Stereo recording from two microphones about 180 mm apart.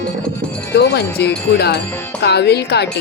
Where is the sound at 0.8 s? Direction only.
70° left (ahead or behind).